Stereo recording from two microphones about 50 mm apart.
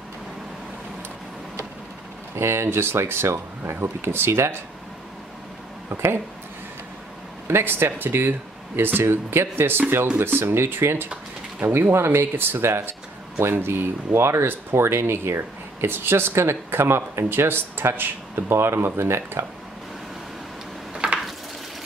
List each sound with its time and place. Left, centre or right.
2.3 s speech: right
7.4 s speech: right
17.2 s speech: right
20.9 s a sound: centre